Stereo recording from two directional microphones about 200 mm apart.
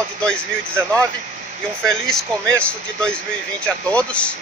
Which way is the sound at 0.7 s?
10° right (ahead or behind).